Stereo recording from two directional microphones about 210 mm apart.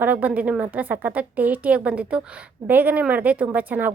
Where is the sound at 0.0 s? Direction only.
5° right (ahead or behind).